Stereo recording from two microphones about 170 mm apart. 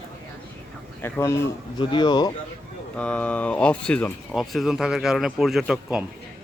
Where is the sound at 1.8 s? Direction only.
25° left (ahead or behind).